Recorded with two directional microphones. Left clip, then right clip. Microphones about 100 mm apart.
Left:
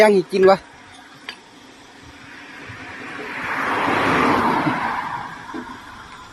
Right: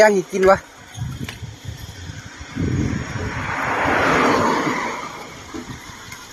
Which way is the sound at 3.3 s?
25° right (ahead or behind).